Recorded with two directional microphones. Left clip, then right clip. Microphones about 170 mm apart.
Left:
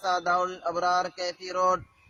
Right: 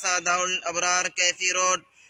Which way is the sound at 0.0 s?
35° left (ahead or behind).